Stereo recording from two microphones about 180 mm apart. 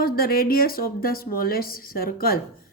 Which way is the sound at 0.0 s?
55° left (ahead or behind).